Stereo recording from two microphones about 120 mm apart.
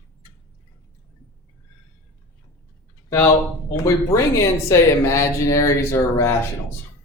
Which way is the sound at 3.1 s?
20° left (ahead or behind).